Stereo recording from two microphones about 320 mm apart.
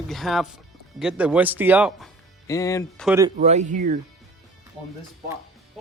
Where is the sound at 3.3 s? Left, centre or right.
Right.